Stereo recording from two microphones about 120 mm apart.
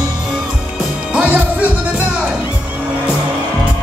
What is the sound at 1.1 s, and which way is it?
Music, 10° right (ahead or behind).